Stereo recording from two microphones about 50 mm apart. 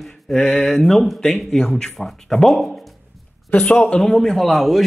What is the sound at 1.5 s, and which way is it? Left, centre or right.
Speech, centre.